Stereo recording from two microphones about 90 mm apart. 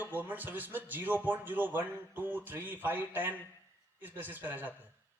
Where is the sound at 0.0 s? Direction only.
20° right (ahead or behind).